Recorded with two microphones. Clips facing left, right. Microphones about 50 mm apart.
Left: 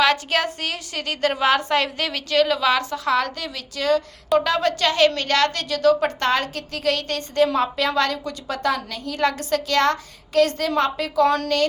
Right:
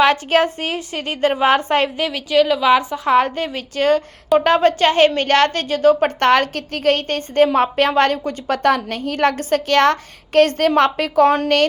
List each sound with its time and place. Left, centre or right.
0.0 s a woman's voice: right
2.0 s a woman's voice: centre; by 11.3 s right